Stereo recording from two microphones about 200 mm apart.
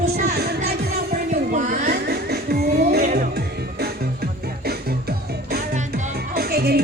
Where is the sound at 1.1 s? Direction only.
40° right (ahead or behind).